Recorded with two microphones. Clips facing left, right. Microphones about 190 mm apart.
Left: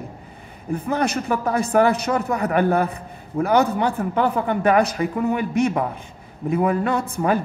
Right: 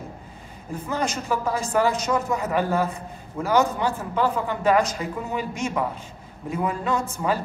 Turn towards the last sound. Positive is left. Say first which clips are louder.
# left 4 dB
turn(degrees=60)  # may be behind; listen again after turning